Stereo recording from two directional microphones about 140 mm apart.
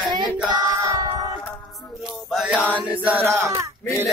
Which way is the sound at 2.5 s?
10° left (ahead or behind).